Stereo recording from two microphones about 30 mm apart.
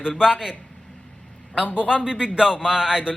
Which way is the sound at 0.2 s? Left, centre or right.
Right.